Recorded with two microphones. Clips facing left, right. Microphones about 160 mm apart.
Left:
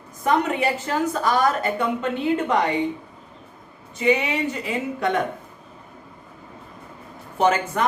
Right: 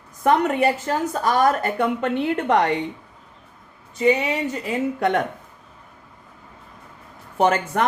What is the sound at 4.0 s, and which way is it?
Speech, 40° right (ahead or behind).